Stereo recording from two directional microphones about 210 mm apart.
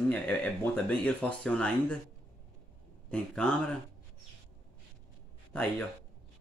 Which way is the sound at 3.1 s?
5° left (ahead or behind).